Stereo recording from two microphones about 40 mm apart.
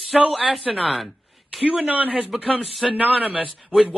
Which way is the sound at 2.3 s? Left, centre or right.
Centre.